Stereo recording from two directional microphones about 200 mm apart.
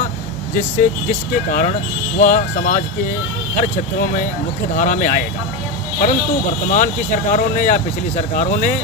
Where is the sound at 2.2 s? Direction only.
40° left (ahead or behind).